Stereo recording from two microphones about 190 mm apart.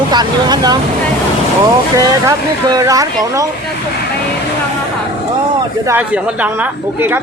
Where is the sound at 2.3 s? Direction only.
20° right (ahead or behind).